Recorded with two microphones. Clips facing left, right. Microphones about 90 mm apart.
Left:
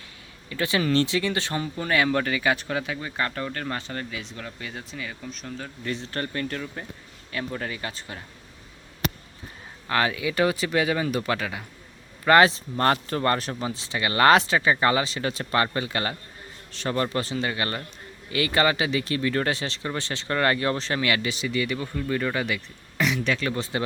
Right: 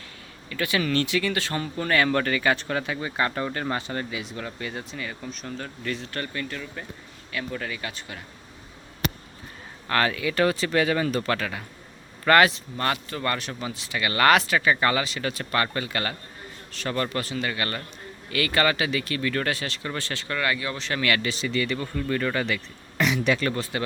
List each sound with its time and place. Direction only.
0.5 s speech: 25° left (ahead or behind); by 5.7 s 5° left (ahead or behind)
5.8 s speech: 25° left (ahead or behind)
9.9 s speech: 15° left (ahead or behind)
12.5 s speech: 35° left (ahead or behind)
20.3 s speech: 40° left (ahead or behind)
21.0 s speech: 15° left (ahead or behind)
23.0 s speech: 5° right (ahead or behind)
23.7 s speech: 25° left (ahead or behind)